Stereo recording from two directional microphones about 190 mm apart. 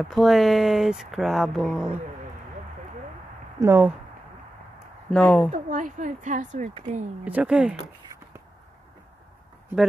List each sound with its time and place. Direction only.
0.0 s speech: centre (ahead or behind)
3.5 s speech: 15° right (ahead or behind)
5.1 s speech: 5° left (ahead or behind)
5.5 s speech: 40° right (ahead or behind)
7.2 s speech: 5° right (ahead or behind)